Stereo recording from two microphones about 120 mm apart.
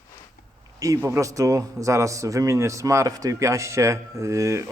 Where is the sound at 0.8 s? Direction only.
25° right (ahead or behind).